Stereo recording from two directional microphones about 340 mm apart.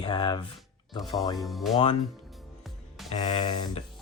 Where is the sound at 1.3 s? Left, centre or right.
Centre.